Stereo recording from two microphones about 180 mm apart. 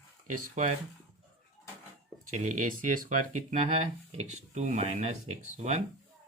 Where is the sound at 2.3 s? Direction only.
45° right (ahead or behind).